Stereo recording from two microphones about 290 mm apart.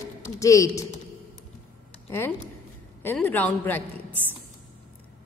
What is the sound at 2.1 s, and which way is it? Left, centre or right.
A woman's voice, centre.